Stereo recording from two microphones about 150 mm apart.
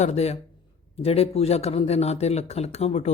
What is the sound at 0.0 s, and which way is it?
Speech, 45° left (ahead or behind).